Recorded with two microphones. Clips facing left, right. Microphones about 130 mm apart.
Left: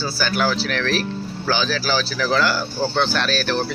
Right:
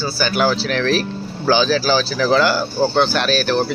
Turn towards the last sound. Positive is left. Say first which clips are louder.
# right 4 dB
turn(degrees=-15)  # may be behind; listen again after turning